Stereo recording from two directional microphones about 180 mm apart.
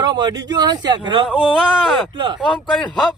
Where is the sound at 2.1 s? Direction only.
25° right (ahead or behind).